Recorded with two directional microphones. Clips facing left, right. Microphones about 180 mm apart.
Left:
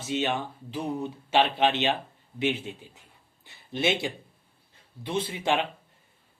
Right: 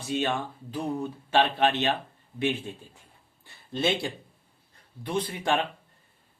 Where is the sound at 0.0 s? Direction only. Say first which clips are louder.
Even; 20° left (ahead or behind).